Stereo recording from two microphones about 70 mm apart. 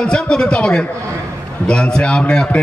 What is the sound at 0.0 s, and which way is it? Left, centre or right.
Speech, centre.